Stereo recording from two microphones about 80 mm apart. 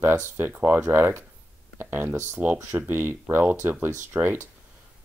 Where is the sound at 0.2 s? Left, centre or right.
Right.